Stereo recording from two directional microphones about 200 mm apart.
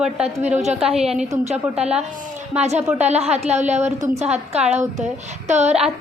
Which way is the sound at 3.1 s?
30° right (ahead or behind).